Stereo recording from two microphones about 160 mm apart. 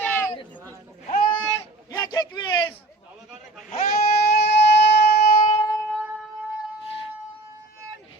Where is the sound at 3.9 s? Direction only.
85° left.